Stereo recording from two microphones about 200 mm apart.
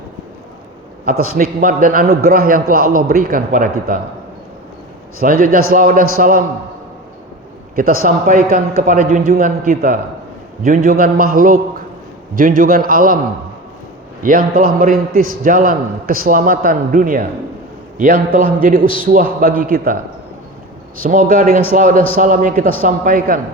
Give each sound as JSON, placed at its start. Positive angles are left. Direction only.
{"t": 1.2, "sound": "a man's voice", "side_deg": -45}
{"t": 5.2, "sound": "a man's voice", "side_deg": -45}
{"t": 7.8, "sound": "a man's voice", "side_deg": -45}
{"t": 14.2, "sound": "a man's voice", "side_deg": -45}
{"t": 21.0, "sound": "a man's voice", "side_deg": -40}